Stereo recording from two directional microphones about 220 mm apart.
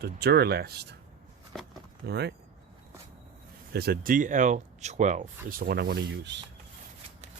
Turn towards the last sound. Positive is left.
turn(degrees=-50)  # may be behind; listen again after turning